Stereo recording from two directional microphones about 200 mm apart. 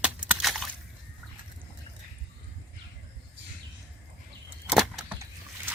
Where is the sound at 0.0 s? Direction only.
5° right (ahead or behind).